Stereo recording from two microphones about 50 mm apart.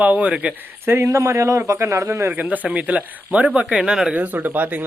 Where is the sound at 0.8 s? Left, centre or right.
Right.